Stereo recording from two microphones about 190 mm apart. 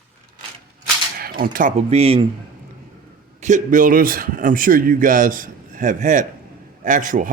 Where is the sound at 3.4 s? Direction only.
40° right (ahead or behind).